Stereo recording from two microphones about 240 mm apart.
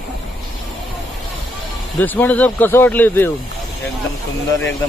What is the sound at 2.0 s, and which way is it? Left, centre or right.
A man's voice, centre.